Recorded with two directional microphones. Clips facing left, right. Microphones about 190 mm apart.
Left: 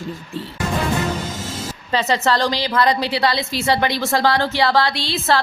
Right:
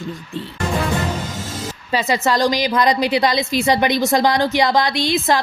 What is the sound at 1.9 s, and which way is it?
A woman's voice, 10° right (ahead or behind).